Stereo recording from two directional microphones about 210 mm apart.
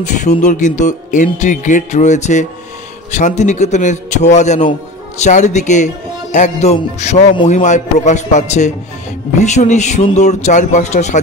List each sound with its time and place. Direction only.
0.0 s music: 35° left (ahead or behind)